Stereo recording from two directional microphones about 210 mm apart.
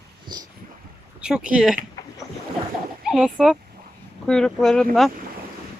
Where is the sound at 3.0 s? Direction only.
Centre (ahead or behind).